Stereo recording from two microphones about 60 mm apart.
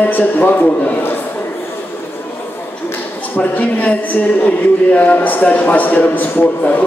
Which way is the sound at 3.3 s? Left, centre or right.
Left.